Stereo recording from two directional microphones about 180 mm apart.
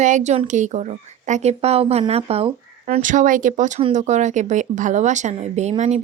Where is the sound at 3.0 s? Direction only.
45° right (ahead or behind).